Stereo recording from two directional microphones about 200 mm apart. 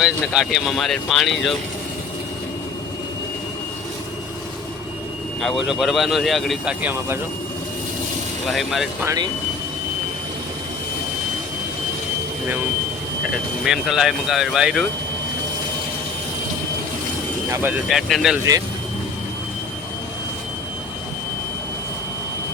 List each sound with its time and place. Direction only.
0.0 s speech: centre (ahead or behind)
5.4 s speech: centre (ahead or behind)
8.4 s speech: centre (ahead or behind)
9.0 s speech: 20° right (ahead or behind)
13.7 s speech: centre (ahead or behind)
17.5 s speech: 10° right (ahead or behind)